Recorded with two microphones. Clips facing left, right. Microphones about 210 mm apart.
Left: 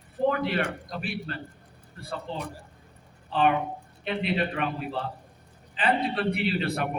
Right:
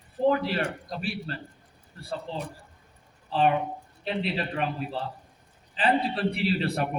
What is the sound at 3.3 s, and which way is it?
A man's voice, 35° right (ahead or behind).